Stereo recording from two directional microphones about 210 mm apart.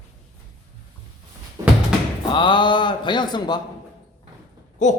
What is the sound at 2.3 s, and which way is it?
A man's voice, 20° left (ahead or behind).